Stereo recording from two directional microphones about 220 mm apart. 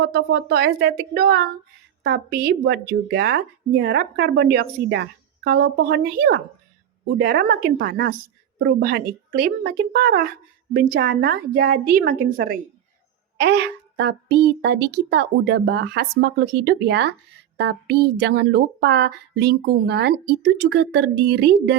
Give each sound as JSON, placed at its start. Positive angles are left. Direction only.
{"t": 0.0, "sound": "speech", "side_deg": -50}